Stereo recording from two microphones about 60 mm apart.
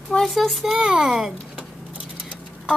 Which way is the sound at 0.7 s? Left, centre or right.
Centre.